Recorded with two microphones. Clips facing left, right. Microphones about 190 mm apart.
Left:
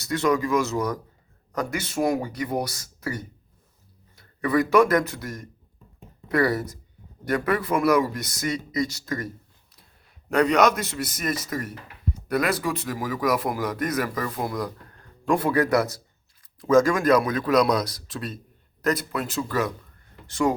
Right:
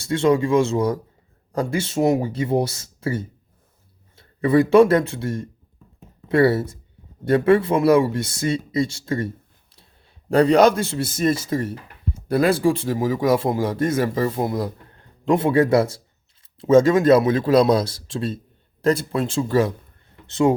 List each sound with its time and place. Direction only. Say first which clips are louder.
0.0 s a man's voice: right 5 dB; 25° right (ahead or behind)